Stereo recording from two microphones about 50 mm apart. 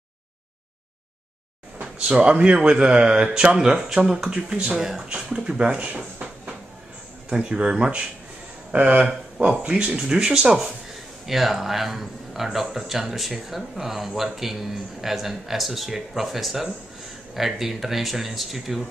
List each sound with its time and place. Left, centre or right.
2.0 s speech: centre
8.7 s speech: right
11.2 s speech: centre